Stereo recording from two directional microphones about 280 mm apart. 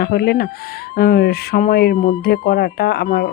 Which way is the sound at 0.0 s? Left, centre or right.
Left.